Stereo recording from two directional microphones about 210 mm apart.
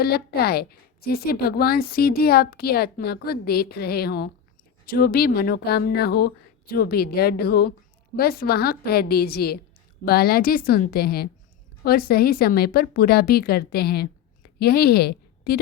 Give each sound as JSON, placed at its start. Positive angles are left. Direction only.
{"t": 0.0, "sound": "a woman's voice", "side_deg": 50}